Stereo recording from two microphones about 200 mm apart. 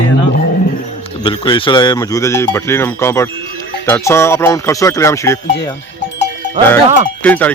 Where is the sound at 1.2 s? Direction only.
25° left (ahead or behind).